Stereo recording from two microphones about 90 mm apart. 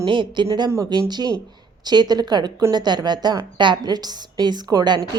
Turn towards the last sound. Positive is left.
turn(degrees=-45)  # may be behind; listen again after turning